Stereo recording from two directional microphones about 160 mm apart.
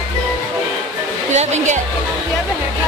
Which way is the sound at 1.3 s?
45° right (ahead or behind).